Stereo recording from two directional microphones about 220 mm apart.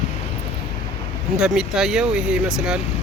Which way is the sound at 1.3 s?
Centre (ahead or behind).